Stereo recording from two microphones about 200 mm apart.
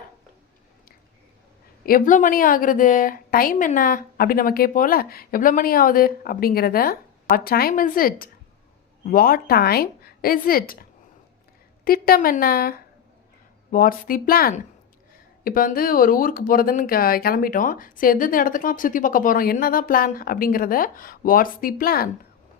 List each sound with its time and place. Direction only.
1.9 s speech: 40° left (ahead or behind)
11.9 s speech: 50° left (ahead or behind)